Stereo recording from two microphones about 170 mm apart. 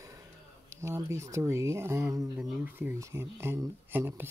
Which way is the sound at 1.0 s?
15° right (ahead or behind).